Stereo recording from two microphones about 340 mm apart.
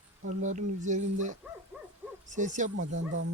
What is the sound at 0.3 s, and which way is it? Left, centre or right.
Speech, right.